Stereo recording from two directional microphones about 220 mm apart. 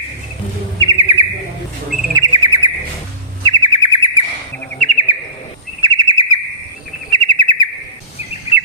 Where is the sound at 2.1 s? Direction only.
15° right (ahead or behind).